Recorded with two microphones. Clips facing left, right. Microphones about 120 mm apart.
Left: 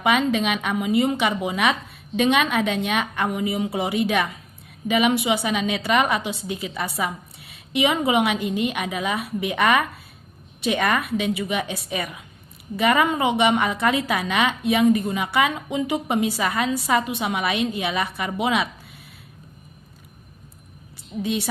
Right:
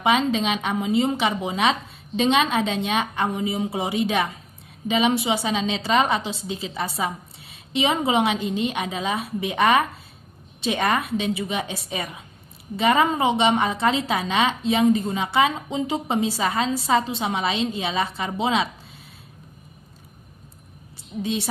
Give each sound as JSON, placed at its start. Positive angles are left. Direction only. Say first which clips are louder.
{"t": 0.0, "sound": "a woman's voice", "louder": "even", "side_deg": -25}
{"t": 21.2, "sound": "a woman's voice", "louder": "left 1 dB", "side_deg": -25}